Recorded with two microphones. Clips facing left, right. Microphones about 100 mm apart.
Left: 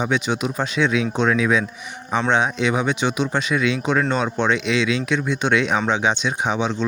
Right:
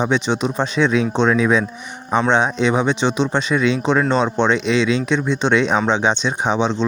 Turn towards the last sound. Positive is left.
turn(degrees=-30)  # may be behind; listen again after turning